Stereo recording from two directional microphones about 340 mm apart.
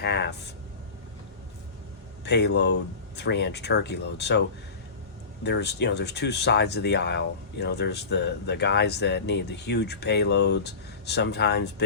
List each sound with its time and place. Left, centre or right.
0.0 s speech: left
2.2 s speech: left